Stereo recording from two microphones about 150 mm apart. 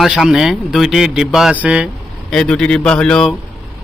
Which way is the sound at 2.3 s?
5° left (ahead or behind).